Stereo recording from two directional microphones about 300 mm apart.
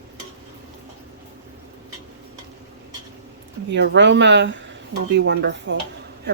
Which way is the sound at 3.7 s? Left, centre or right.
Right.